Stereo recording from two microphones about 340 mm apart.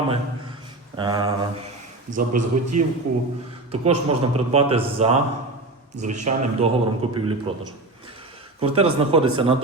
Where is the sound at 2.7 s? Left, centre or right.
Right.